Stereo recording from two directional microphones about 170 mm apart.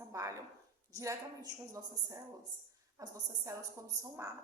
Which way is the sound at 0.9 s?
20° right (ahead or behind).